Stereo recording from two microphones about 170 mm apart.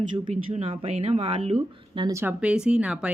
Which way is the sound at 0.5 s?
40° right (ahead or behind).